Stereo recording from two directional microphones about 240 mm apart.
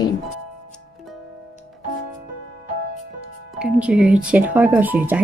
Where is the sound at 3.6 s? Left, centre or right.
Centre.